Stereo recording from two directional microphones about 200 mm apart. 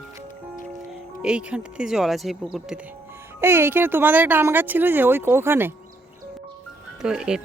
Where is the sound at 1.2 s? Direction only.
5° right (ahead or behind).